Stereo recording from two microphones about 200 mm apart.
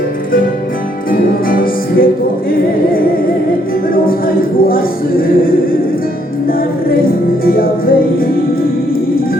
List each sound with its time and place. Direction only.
1.1 s music: 45° left (ahead or behind)
3.9 s a capella: 45° left (ahead or behind)
7.0 s music: 45° left (ahead or behind)